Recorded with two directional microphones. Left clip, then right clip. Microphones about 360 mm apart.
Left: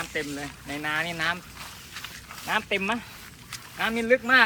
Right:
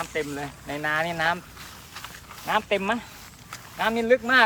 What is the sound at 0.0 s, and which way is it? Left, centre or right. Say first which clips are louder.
Speech: right 2 dB; right.